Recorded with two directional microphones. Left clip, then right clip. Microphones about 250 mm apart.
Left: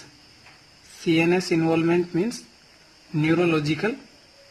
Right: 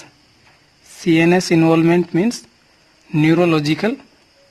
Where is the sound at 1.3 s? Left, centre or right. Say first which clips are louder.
Right 8 dB; right.